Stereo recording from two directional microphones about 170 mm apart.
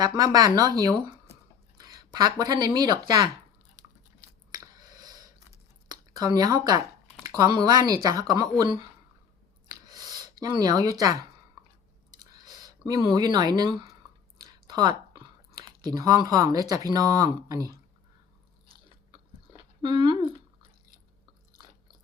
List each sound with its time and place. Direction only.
0.0 s speech: 20° right (ahead or behind)
4.2 s chewing: 20° right (ahead or behind)
5.9 s speech: 25° right (ahead or behind)
9.6 s a sound: 25° right (ahead or behind)
12.1 s chewing: 25° right (ahead or behind)
12.9 s speech: 25° right (ahead or behind)
19.8 s speech: 30° right (ahead or behind)